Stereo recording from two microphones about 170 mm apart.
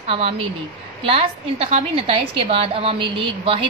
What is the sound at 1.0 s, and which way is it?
A woman's voice, 35° right (ahead or behind).